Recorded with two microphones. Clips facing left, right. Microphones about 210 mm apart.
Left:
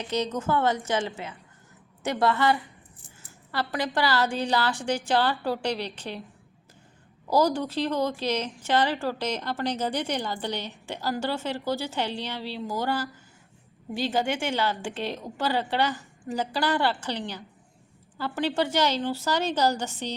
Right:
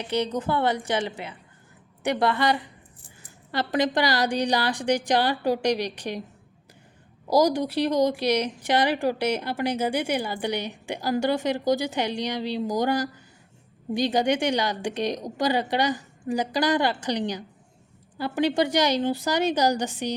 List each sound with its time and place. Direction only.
0.0 s a woman's voice: 10° right (ahead or behind)
7.3 s a woman's voice: 15° right (ahead or behind)